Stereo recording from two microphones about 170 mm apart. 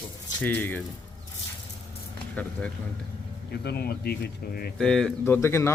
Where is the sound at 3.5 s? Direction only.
70° left (ahead or behind).